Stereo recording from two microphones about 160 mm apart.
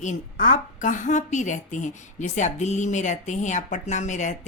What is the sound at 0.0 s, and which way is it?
A woman's voice, 50° left (ahead or behind).